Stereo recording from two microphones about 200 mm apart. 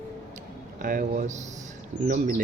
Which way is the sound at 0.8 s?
45° right (ahead or behind).